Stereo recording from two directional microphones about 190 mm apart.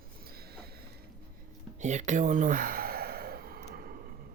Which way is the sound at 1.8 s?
40° right (ahead or behind).